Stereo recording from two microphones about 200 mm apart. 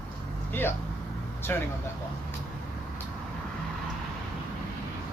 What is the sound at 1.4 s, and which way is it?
Vehicle, 10° left (ahead or behind).